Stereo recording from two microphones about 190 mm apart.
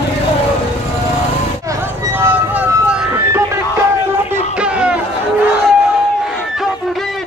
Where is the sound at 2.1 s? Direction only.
10° right (ahead or behind).